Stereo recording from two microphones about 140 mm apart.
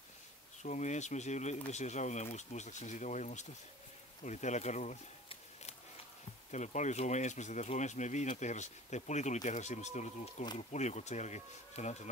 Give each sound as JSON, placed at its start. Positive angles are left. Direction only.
{"t": 0.6, "sound": "speech", "side_deg": 55}
{"t": 4.2, "sound": "a sound", "side_deg": 55}
{"t": 6.5, "sound": "speech", "side_deg": 60}